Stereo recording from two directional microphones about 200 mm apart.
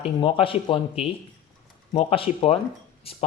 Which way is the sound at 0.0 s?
25° left (ahead or behind).